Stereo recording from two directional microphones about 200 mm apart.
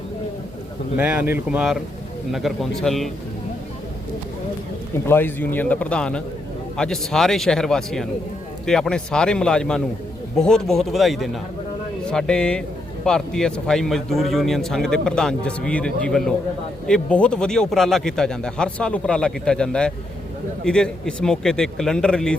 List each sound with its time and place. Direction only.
0.9 s a man's voice: 10° right (ahead or behind)
5.0 s a man's voice: 10° left (ahead or behind)